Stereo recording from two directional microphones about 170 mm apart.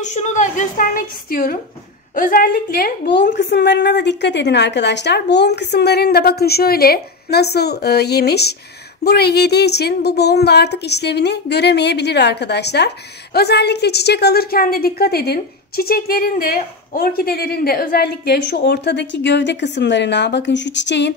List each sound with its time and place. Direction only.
0.0 s a woman's voice: 45° left (ahead or behind); by 21.1 s 90° left